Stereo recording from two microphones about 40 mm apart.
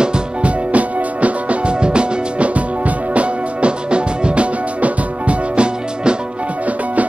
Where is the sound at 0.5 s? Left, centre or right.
Right.